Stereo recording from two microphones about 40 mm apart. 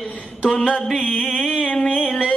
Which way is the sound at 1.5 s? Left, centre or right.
Left.